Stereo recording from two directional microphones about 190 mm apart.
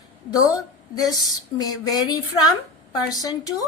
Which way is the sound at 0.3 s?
20° left (ahead or behind).